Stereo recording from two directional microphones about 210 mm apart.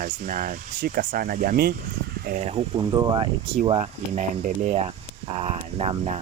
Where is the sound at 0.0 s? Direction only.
40° right (ahead or behind); by 3.2 s 20° right (ahead or behind).